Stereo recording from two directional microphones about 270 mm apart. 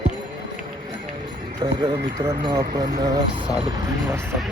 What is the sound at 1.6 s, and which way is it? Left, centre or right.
Speech, centre.